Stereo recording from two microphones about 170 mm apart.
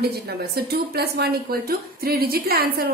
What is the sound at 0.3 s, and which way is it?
A woman's voice, 70° right (ahead or behind).